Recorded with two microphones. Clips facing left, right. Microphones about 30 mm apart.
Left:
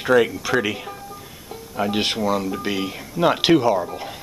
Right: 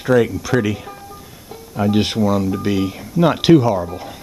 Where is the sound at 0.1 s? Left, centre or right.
Centre.